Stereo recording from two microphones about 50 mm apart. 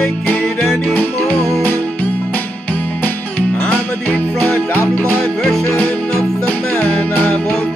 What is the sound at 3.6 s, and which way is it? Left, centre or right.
Music, left.